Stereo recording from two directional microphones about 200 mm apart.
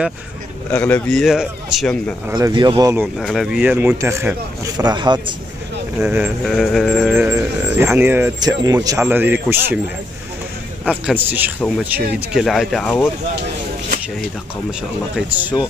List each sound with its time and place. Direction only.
0.7 s a man's voice: 10° left (ahead or behind)
2.2 s speech: 20° right (ahead or behind)
3.2 s speech: centre (ahead or behind); by 5.3 s 20° right (ahead or behind)
5.9 s a man's voice: 5° right (ahead or behind)
7.2 s speech: 10° right (ahead or behind)
10.9 s a man's voice: 10° right (ahead or behind)
14.7 s a man's voice: 5° right (ahead or behind)